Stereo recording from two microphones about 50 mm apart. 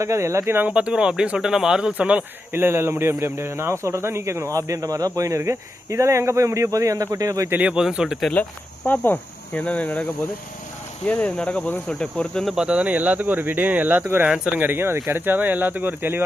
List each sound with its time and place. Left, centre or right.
0.0 s speech: right
0.7 s speech: centre
1.9 s speech: right
2.5 s speech: right
7.6 s speech: centre
8.8 s speech: left
9.6 s speech: left
11.1 s speech: left
12.5 s speech: right
14.0 s speech: right